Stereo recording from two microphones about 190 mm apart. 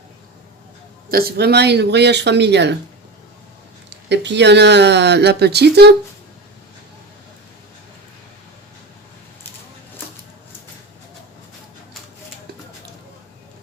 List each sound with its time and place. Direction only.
1.1 s speech: 60° right (ahead or behind)
3.8 s speech: 65° right (ahead or behind)